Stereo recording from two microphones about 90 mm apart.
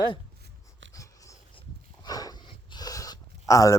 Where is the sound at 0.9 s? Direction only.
40° left (ahead or behind).